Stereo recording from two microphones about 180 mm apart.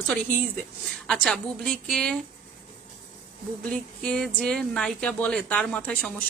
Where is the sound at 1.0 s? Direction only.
5° left (ahead or behind).